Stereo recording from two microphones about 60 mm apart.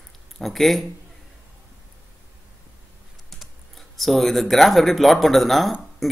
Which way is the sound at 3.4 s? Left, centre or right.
Centre.